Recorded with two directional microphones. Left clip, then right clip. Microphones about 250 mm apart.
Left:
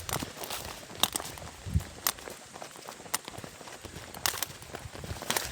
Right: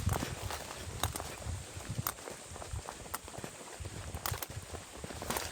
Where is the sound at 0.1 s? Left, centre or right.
Left.